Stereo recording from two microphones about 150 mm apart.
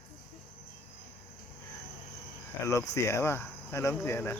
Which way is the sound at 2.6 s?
20° left (ahead or behind).